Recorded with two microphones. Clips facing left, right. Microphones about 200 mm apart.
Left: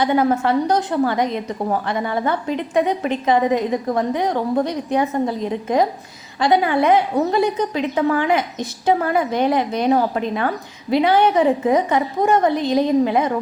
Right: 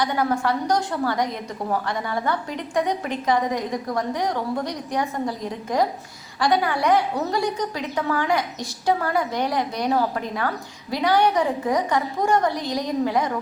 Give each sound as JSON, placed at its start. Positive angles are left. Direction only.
{"t": 0.0, "sound": "a woman's voice", "side_deg": 25}